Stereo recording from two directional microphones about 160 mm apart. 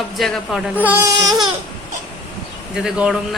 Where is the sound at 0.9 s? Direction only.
15° right (ahead or behind).